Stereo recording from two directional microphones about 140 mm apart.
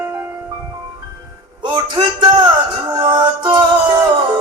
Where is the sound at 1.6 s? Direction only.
30° right (ahead or behind).